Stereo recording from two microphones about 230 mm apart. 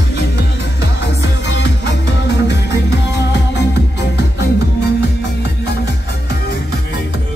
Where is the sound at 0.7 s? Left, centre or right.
Left.